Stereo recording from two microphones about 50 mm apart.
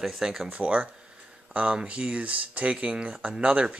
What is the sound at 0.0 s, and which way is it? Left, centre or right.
Speech, centre.